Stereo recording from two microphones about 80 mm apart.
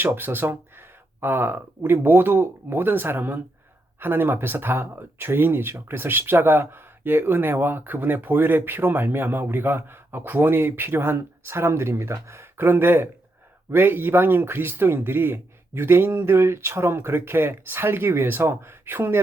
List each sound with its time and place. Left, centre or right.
0.0 s speech: right